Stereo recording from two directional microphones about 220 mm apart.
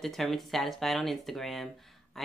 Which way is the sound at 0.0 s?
Centre (ahead or behind).